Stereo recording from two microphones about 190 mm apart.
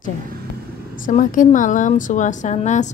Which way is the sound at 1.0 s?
45° left (ahead or behind).